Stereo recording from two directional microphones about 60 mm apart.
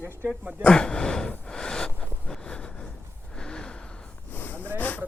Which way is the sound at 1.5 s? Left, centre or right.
Centre.